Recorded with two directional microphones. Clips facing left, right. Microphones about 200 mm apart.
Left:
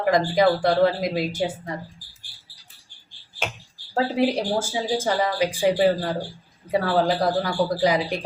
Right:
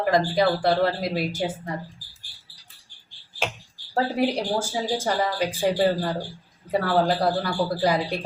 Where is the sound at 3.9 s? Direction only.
20° left (ahead or behind).